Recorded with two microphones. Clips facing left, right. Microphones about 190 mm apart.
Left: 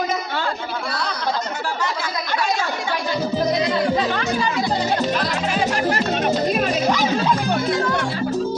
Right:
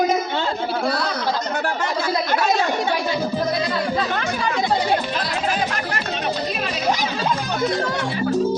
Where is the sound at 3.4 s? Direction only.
20° left (ahead or behind).